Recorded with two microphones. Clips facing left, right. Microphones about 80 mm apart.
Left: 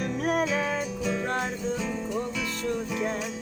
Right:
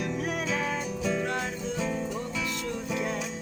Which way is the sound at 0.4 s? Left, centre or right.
Left.